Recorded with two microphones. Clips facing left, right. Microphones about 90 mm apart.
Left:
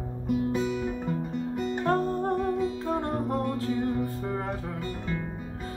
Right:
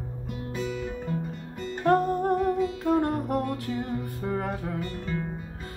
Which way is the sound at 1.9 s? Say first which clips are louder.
Right 5 dB; 15° right (ahead or behind).